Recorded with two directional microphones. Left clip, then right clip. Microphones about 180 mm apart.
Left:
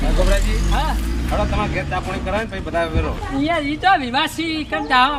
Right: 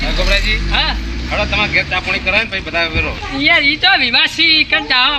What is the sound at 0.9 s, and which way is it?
Speech, 5° right (ahead or behind).